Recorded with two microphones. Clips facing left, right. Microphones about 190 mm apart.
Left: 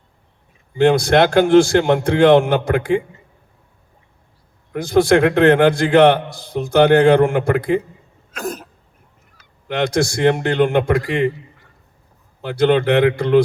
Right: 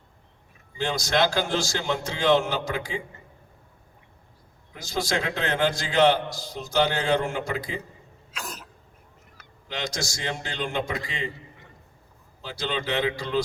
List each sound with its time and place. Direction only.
0.8 s a man's voice: 60° left (ahead or behind)
4.7 s a man's voice: 60° left (ahead or behind)
8.3 s cough: 55° left (ahead or behind)
9.6 s a man's voice: 60° left (ahead or behind)
12.4 s a man's voice: 60° left (ahead or behind)